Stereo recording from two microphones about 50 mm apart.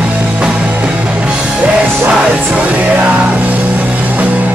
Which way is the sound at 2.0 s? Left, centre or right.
Right.